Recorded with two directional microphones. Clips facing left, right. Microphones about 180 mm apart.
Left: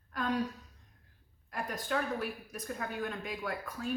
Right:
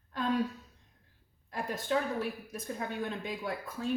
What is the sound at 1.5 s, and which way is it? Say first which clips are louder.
Speech: right 3 dB; 25° right (ahead or behind).